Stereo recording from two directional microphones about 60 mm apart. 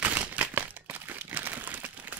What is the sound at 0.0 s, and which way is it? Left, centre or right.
Crumpling, right.